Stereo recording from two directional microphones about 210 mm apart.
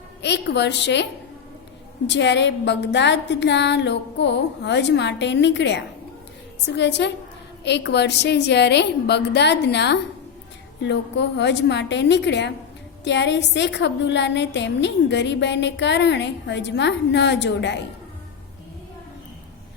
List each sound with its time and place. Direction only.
0.2 s a woman's voice: 55° left (ahead or behind)
2.0 s a woman's voice: 55° left (ahead or behind)